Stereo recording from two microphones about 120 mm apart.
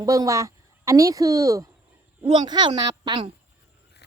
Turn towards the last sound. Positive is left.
turn(degrees=-40)  # may be behind; listen again after turning